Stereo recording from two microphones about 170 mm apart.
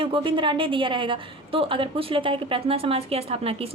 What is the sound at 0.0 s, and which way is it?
A woman's voice, 30° right (ahead or behind).